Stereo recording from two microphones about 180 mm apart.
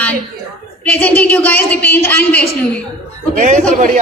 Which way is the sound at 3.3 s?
45° right (ahead or behind).